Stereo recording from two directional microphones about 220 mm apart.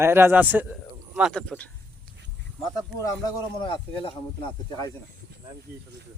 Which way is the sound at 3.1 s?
20° left (ahead or behind).